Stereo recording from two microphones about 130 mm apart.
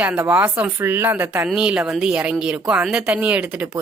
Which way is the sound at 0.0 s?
10° right (ahead or behind).